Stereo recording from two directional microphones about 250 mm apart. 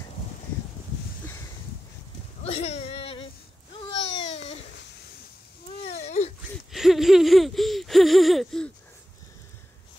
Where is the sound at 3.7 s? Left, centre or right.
Left.